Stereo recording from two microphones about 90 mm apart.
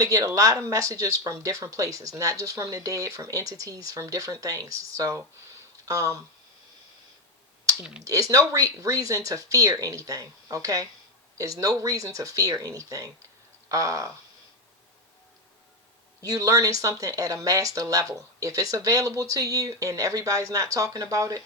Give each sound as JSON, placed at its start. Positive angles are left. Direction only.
{"t": 0.0, "sound": "speech", "side_deg": -40}
{"t": 8.0, "sound": "speech", "side_deg": -40}
{"t": 16.2, "sound": "speech", "side_deg": -40}